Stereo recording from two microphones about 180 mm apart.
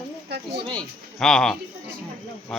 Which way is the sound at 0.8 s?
5° left (ahead or behind).